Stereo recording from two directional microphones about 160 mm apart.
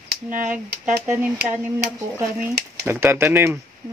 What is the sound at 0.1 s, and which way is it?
Speech, 55° right (ahead or behind).